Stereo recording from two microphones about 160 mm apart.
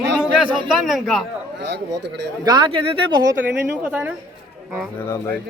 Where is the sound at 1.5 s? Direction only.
90° right.